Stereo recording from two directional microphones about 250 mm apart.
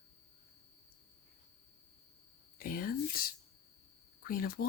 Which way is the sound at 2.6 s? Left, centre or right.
Left.